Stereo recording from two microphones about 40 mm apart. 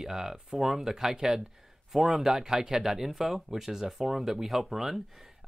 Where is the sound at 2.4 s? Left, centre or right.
Centre.